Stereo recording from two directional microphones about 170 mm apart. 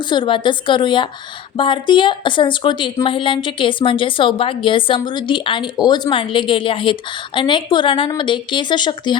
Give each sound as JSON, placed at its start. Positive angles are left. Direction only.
{"t": 0.0, "sound": "a woman's voice", "side_deg": 25}